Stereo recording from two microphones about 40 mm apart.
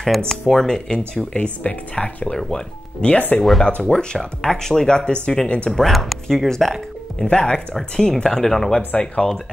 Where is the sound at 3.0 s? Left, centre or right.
Left.